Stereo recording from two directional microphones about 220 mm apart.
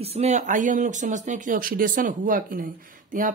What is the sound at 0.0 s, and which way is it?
Speech, 30° right (ahead or behind).